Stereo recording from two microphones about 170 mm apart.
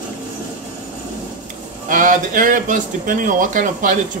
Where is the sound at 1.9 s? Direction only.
50° right (ahead or behind).